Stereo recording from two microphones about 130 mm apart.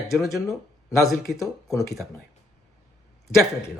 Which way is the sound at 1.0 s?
Centre (ahead or behind).